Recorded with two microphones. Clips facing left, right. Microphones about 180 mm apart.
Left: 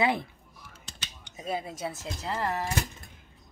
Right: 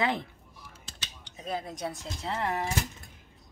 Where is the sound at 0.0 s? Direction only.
10° left (ahead or behind).